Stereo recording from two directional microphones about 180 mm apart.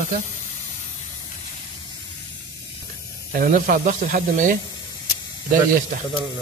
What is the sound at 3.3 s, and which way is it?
Speech, 50° right (ahead or behind).